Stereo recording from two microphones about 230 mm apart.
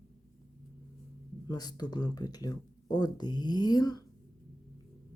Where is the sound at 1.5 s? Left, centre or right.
Centre.